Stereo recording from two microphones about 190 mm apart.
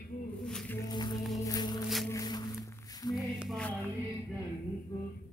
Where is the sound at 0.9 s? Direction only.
20° left (ahead or behind).